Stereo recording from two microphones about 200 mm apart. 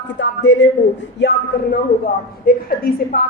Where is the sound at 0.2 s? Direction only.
65° left (ahead or behind).